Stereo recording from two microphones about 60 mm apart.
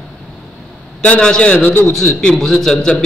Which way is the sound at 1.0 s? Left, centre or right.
Centre.